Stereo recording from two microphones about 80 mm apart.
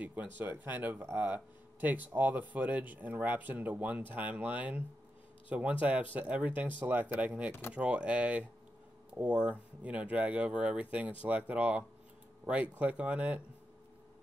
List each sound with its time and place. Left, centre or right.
0.0 s speech: right